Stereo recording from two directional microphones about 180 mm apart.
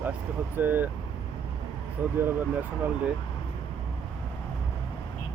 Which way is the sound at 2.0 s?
10° right (ahead or behind).